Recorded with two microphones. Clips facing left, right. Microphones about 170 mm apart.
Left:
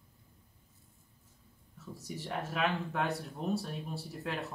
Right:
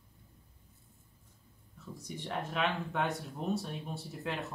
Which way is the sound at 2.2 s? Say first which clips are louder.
Even; 5° left (ahead or behind).